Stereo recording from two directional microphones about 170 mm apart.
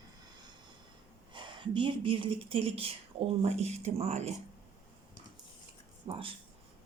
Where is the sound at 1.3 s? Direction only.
30° right (ahead or behind).